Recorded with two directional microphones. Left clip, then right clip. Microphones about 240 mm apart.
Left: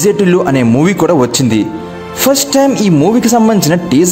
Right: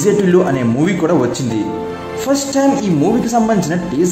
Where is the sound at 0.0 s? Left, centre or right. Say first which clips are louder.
Left 2 dB; left.